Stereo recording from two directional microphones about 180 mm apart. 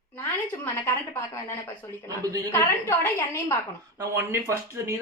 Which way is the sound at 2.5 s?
15° left (ahead or behind).